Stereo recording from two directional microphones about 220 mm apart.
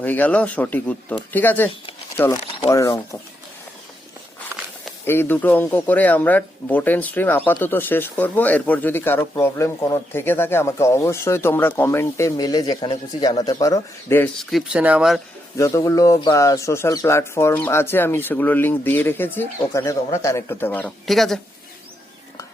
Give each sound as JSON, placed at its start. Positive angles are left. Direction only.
{"t": 0.0, "sound": "speech", "side_deg": 10}
{"t": 5.0, "sound": "speech", "side_deg": 10}
{"t": 15.5, "sound": "speech", "side_deg": 15}